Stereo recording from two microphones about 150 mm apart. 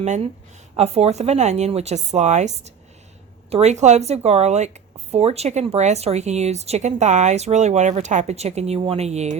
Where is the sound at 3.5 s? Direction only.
50° right (ahead or behind).